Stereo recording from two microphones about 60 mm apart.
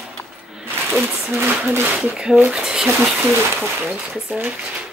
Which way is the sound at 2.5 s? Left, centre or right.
Centre.